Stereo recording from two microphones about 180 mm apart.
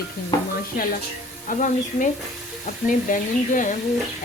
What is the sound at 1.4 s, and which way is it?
Speech, 45° left (ahead or behind).